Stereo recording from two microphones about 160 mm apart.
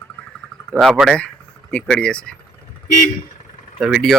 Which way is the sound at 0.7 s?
5° right (ahead or behind).